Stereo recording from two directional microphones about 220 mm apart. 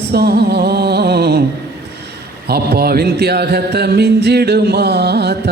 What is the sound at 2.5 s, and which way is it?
Music, 45° right (ahead or behind).